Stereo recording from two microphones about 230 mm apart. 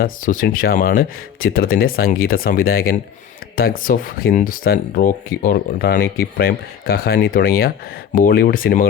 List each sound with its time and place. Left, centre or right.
0.0 s speech: left